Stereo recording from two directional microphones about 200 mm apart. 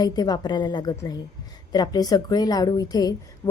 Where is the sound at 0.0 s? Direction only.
20° left (ahead or behind).